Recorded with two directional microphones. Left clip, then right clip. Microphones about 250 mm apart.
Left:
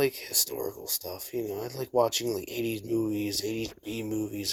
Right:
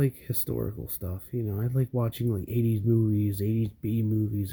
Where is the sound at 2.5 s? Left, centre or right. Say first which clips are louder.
Right 2 dB; centre.